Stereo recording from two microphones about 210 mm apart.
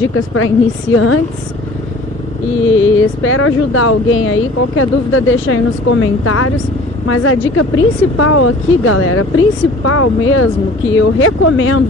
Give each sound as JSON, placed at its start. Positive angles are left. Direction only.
{"t": 0.9, "sound": "a woman's voice", "side_deg": 90}
{"t": 2.7, "sound": "speech", "side_deg": 70}
{"t": 7.1, "sound": "a woman's voice", "side_deg": 80}
{"t": 10.9, "sound": "speech", "side_deg": 70}